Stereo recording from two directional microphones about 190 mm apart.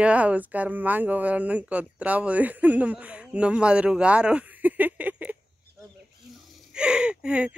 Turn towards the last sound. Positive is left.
turn(degrees=-5)  # may be behind; listen again after turning